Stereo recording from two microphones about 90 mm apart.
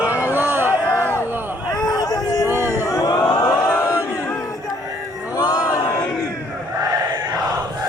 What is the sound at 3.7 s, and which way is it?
Chant, 30° left (ahead or behind).